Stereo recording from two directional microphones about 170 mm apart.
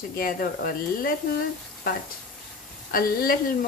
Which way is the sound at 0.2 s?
55° left (ahead or behind).